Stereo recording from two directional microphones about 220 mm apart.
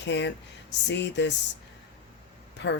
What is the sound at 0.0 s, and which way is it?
Speech, 55° left (ahead or behind).